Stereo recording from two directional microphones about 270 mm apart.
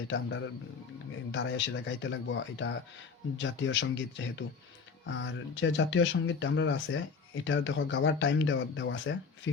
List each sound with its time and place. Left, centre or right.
0.1 s speech: left